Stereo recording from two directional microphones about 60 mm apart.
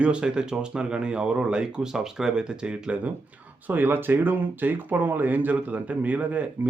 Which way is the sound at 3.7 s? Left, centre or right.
Right.